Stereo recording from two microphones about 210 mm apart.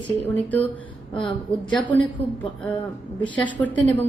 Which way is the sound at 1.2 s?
25° left (ahead or behind).